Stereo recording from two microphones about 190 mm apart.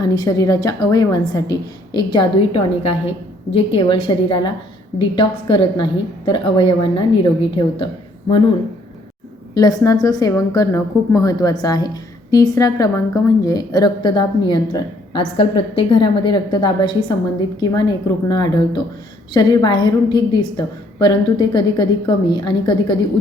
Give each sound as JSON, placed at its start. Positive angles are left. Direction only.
{"t": 0.0, "sound": "a woman's voice", "side_deg": 20}
{"t": 9.6, "sound": "a woman's voice", "side_deg": 20}
{"t": 18.3, "sound": "a woman's voice", "side_deg": 20}